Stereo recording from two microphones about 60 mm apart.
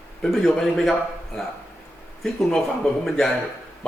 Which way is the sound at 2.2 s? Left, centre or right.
Centre.